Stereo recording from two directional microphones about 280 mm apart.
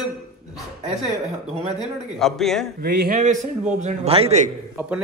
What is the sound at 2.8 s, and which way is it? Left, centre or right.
Speech, right.